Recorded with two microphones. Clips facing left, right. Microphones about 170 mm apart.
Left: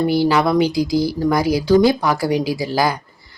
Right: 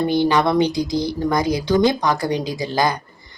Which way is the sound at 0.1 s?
5° left (ahead or behind).